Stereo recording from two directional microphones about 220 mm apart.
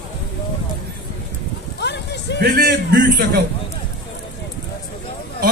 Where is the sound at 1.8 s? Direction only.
50° left (ahead or behind).